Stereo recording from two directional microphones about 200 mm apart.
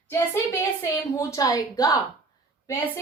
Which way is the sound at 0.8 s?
15° left (ahead or behind).